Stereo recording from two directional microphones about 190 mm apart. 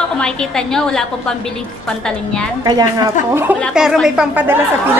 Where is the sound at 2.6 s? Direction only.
20° right (ahead or behind).